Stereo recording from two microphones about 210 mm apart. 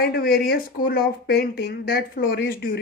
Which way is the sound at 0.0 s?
45° left (ahead or behind).